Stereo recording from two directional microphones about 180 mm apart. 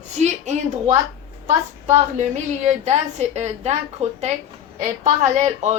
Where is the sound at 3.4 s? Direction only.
35° right (ahead or behind).